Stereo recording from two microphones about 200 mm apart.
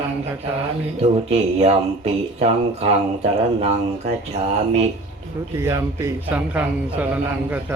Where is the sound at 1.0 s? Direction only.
30° right (ahead or behind).